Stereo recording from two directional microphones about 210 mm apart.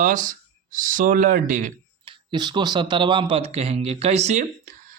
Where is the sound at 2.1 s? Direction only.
20° right (ahead or behind).